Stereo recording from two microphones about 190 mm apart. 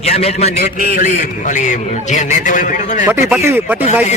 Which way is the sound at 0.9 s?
45° left (ahead or behind).